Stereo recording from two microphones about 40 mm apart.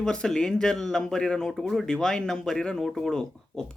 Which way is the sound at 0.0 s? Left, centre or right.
Left.